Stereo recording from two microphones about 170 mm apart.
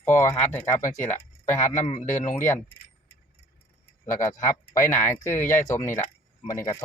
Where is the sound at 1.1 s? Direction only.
45° left (ahead or behind).